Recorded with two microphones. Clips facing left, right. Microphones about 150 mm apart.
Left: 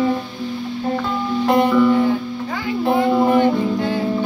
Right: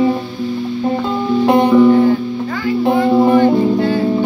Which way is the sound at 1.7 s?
40° right (ahead or behind).